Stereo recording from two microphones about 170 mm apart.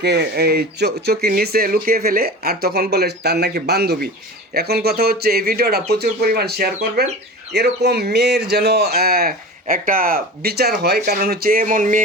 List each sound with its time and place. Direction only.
0.0 s speech: 75° right (ahead or behind); by 12.0 s 50° right (ahead or behind)